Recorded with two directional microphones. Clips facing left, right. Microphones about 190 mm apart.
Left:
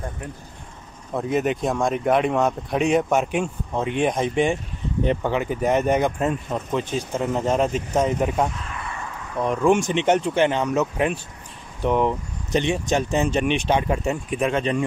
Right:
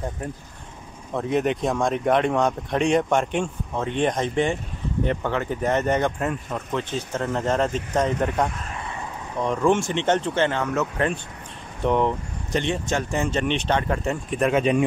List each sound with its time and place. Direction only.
1.1 s speech: centre (ahead or behind)
8.8 s a sound: 20° right (ahead or behind)
9.4 s speech: 10° left (ahead or behind)
11.8 s speech: 5° left (ahead or behind)
12.5 s speech: 15° left (ahead or behind)
14.4 s speech: 10° right (ahead or behind)